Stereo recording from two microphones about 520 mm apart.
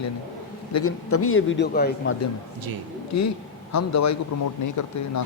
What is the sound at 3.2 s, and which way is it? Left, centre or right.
A man's voice, left.